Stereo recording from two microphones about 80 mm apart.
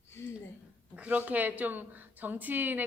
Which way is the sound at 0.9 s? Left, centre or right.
Centre.